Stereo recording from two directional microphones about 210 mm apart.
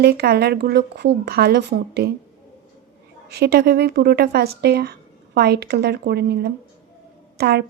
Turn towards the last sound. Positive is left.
turn(degrees=-50)  # may be behind; listen again after turning